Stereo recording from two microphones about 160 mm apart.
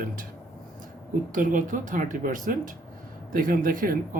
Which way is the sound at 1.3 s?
55° right (ahead or behind).